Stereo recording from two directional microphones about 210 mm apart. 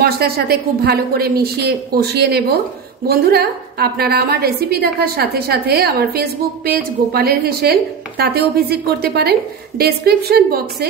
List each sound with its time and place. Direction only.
0.0 s a woman's voice: 50° right (ahead or behind)